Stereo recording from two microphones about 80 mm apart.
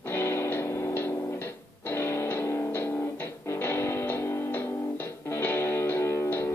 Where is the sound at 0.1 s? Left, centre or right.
Left.